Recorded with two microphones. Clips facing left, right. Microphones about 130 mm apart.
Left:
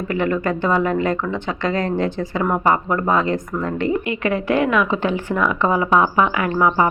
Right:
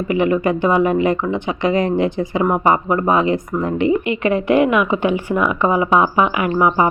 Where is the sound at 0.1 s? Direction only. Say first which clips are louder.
Right 4 dB; 15° right (ahead or behind).